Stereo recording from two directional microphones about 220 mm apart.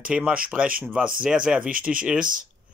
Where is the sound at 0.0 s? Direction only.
5° right (ahead or behind).